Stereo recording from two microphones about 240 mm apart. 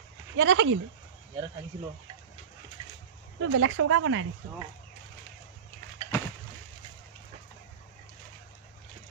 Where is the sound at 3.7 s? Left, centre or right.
Right.